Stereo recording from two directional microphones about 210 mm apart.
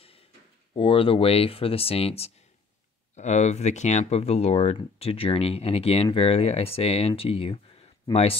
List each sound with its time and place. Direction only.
0.7 s speech: 25° left (ahead or behind)